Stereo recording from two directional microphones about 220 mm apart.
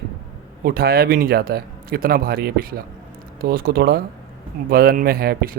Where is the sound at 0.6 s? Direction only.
45° right (ahead or behind).